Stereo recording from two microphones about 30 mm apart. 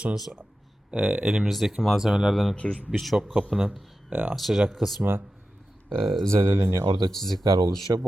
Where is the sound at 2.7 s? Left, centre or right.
Right.